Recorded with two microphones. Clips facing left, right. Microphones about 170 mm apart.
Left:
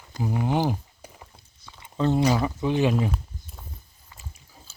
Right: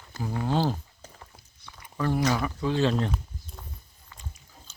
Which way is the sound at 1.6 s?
25° left (ahead or behind).